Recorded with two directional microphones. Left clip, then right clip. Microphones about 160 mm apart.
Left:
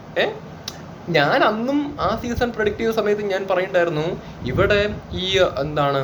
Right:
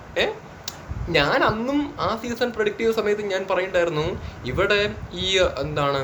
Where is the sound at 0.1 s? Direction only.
15° right (ahead or behind).